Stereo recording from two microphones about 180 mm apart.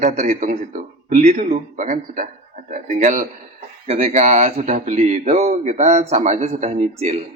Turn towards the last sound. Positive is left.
turn(degrees=-40)  # may be behind; listen again after turning